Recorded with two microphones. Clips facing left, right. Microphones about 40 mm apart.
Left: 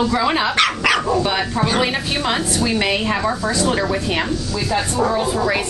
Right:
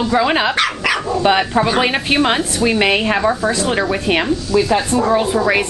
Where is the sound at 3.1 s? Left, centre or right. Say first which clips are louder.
Right 3 dB; centre.